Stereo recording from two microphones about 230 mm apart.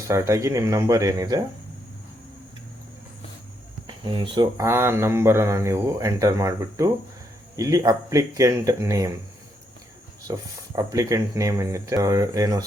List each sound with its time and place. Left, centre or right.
0.1 s speech: centre
3.8 s speech: right
10.3 s speech: centre